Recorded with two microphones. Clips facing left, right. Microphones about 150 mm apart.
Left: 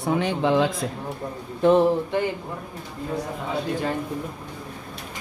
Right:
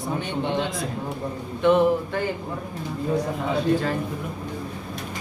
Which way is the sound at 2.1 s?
20° left (ahead or behind).